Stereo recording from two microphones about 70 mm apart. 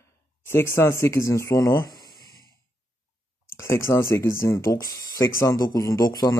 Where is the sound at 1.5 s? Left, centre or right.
Left.